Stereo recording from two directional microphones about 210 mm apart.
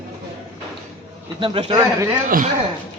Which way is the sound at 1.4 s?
25° right (ahead or behind).